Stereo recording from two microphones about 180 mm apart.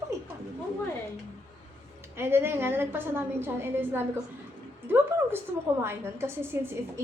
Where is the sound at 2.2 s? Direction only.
10° right (ahead or behind).